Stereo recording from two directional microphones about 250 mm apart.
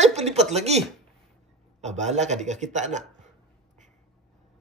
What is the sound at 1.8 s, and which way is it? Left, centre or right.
Speech, right.